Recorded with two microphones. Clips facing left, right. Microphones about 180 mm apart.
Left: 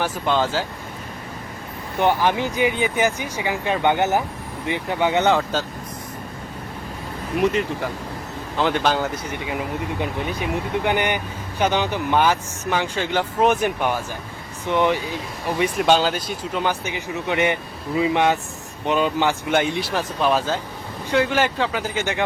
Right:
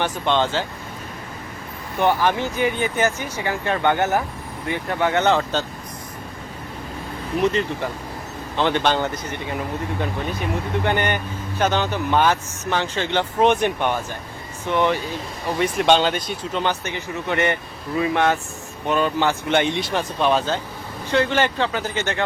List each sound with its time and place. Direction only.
0.0 s speech: 5° left (ahead or behind)
2.0 s speech: 15° left (ahead or behind)
8.5 s speech: 5° left (ahead or behind)
15.8 s speech: 5° left (ahead or behind)